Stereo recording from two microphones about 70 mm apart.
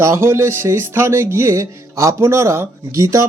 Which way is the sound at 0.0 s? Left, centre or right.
Right.